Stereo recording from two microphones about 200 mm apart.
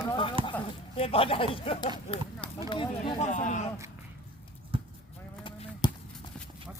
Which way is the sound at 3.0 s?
40° left (ahead or behind).